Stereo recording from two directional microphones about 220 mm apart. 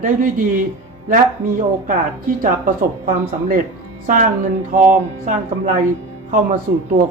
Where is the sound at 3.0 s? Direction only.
40° right (ahead or behind).